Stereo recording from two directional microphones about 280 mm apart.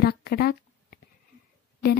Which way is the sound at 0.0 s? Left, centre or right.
Left.